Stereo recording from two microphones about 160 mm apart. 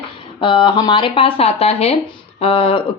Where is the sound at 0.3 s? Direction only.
30° left (ahead or behind).